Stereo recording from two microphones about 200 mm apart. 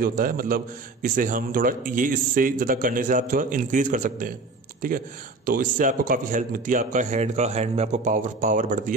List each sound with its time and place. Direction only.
0.0 s a man's voice: 45° right (ahead or behind)